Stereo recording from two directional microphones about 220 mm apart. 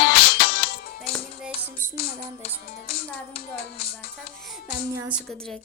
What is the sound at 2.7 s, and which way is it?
Music, 45° left (ahead or behind).